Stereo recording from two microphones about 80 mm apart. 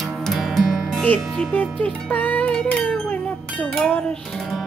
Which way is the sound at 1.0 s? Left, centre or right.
Centre.